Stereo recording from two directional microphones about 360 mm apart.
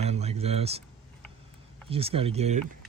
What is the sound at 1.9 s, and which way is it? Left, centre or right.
Speech, centre.